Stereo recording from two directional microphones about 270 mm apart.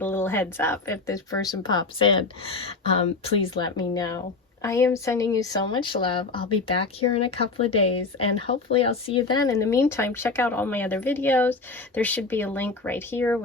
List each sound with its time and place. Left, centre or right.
0.0 s speech: centre